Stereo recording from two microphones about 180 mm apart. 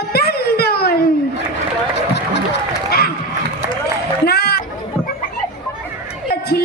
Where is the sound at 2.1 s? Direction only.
65° left (ahead or behind).